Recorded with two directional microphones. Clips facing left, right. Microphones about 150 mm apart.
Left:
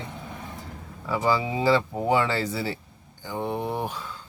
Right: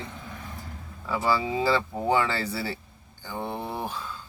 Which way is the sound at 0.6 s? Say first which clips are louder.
Left 2 dB; 15° left (ahead or behind).